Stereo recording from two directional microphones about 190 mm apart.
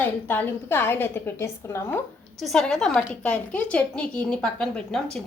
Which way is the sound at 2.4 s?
Centre (ahead or behind).